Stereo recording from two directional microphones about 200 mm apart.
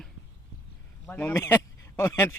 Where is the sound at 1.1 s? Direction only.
10° left (ahead or behind).